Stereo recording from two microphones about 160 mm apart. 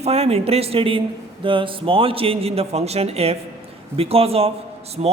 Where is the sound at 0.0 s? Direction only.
40° right (ahead or behind).